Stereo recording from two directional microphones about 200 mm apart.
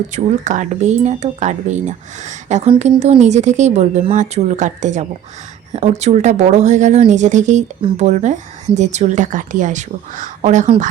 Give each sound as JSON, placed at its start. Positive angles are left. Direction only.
{"t": 0.1, "sound": "speech", "side_deg": -40}